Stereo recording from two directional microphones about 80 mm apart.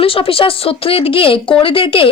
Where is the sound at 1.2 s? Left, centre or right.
Left.